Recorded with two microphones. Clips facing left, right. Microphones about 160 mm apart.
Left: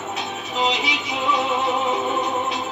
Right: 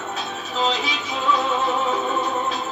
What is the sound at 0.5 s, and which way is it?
Music, 15° left (ahead or behind).